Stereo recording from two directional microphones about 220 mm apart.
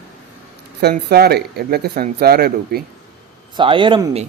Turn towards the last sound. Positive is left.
turn(degrees=-20)  # may be behind; listen again after turning